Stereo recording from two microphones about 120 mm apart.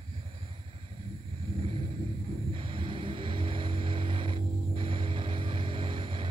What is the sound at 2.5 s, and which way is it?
Vehicle, 45° right (ahead or behind).